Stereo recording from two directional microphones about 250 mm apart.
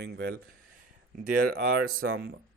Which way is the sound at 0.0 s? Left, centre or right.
Right.